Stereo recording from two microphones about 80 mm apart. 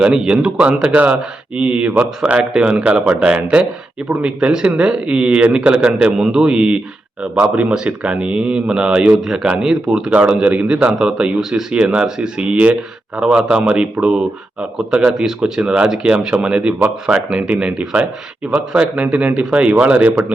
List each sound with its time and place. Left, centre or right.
0.0 s speech: centre